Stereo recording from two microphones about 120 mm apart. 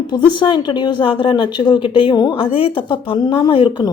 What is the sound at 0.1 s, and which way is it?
A woman's voice, 40° left (ahead or behind).